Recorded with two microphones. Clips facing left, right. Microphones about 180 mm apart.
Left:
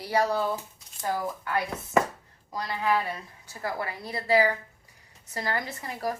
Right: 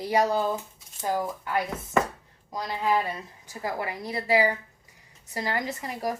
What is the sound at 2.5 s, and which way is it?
A woman's voice, 20° right (ahead or behind).